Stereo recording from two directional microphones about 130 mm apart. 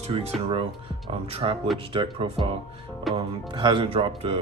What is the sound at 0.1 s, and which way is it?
Speech, 45° right (ahead or behind).